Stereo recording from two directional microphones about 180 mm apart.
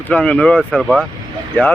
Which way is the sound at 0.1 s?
5° left (ahead or behind).